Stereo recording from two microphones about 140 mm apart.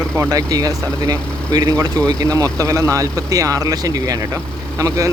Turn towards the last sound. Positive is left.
turn(degrees=-25)  # may be behind; listen again after turning